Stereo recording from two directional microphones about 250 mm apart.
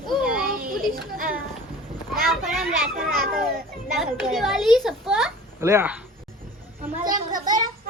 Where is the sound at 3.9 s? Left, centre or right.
Centre.